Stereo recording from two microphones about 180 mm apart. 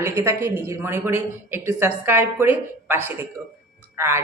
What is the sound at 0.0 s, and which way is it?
Speech, 15° right (ahead or behind).